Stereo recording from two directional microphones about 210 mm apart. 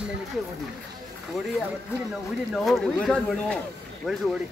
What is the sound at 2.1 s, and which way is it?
Speech, centre (ahead or behind).